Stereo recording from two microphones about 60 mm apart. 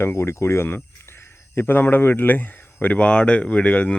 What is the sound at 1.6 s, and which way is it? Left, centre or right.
Speech, left.